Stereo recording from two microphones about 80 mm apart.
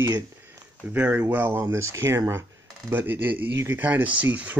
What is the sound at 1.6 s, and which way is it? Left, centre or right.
Speech, right.